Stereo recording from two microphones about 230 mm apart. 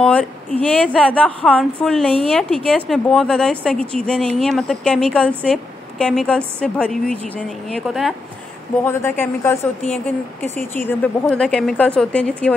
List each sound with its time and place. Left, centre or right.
0.0 s a woman's voice: centre
8.8 s a woman's voice: centre